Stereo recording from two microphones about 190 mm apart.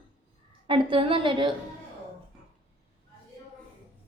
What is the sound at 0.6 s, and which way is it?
Speech, 25° right (ahead or behind).